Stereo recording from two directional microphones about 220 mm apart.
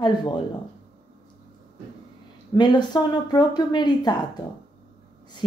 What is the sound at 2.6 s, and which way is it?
Speech, 20° left (ahead or behind).